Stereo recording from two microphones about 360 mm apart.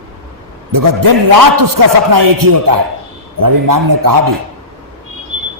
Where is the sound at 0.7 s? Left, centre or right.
Right.